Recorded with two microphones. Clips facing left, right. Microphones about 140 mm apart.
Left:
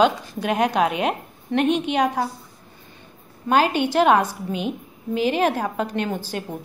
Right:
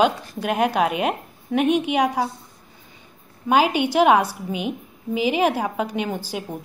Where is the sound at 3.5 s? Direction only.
10° right (ahead or behind).